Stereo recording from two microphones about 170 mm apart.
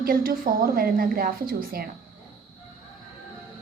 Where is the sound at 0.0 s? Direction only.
60° right (ahead or behind).